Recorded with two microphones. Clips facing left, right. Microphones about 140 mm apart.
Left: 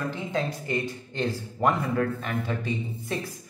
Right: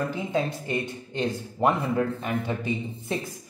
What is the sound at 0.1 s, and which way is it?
Speech, 15° right (ahead or behind).